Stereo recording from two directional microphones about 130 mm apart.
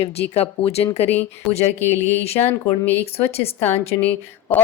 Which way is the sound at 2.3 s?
55° left (ahead or behind).